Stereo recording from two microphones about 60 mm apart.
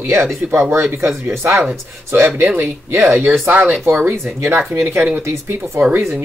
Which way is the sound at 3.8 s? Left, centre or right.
Right.